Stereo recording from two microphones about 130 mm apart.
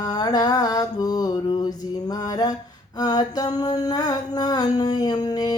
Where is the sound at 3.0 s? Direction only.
30° left (ahead or behind).